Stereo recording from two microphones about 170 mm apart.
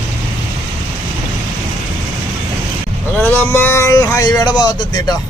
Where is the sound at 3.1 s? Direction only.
10° left (ahead or behind).